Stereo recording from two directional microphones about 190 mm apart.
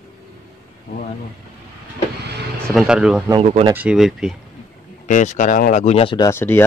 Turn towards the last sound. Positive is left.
turn(degrees=10)  # may be behind; listen again after turning